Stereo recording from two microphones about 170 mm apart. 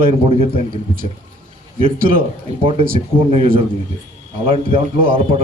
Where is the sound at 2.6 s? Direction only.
35° right (ahead or behind).